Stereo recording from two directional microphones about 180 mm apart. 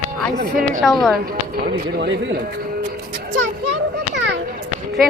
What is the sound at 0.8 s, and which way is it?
Speech, centre (ahead or behind).